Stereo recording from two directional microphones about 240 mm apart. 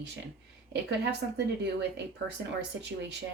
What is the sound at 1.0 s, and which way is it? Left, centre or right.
Speech, right.